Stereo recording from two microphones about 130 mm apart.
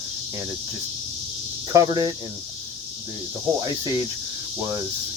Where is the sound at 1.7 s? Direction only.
30° right (ahead or behind).